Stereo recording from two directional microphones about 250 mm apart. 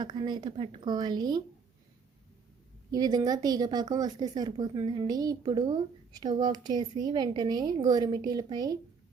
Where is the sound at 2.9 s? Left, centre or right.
Centre.